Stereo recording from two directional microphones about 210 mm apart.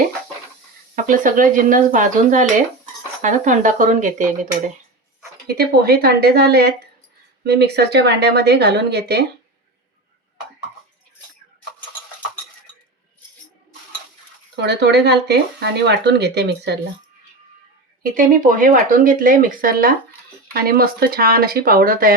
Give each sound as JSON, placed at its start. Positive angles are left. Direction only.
{"t": 0.9, "sound": "speech", "side_deg": -40}
{"t": 5.5, "sound": "speech", "side_deg": -45}
{"t": 14.6, "sound": "speech", "side_deg": -55}
{"t": 18.0, "sound": "speech", "side_deg": -40}